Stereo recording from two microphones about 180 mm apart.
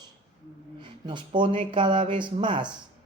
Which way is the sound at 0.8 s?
25° right (ahead or behind).